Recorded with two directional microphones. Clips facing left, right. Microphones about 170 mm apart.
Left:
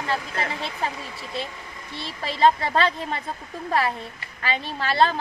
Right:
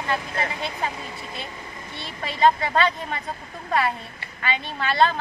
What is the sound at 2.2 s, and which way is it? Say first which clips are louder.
A woman's voice: even; 30° left (ahead or behind).